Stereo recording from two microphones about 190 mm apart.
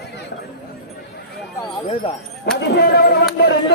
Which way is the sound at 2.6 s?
60° left (ahead or behind).